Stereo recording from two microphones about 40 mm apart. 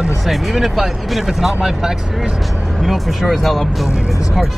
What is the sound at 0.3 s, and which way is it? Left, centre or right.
Speech, centre.